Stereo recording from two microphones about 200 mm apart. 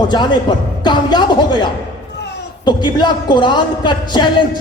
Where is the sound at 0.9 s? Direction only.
20° left (ahead or behind).